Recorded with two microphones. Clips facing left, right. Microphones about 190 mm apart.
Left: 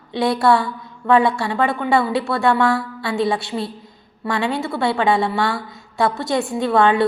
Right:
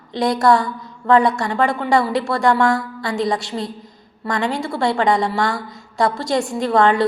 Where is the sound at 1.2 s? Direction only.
5° left (ahead or behind).